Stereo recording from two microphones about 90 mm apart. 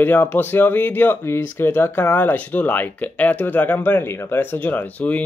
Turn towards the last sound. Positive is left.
turn(degrees=15)  # may be behind; listen again after turning